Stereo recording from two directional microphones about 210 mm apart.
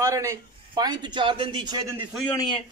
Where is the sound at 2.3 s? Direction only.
20° left (ahead or behind).